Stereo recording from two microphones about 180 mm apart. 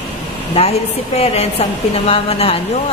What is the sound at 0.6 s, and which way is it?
A woman's voice, 35° left (ahead or behind).